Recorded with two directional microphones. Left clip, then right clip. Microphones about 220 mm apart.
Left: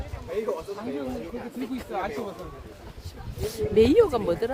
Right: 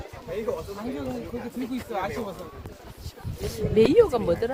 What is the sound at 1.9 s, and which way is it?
Speech, 50° right (ahead or behind).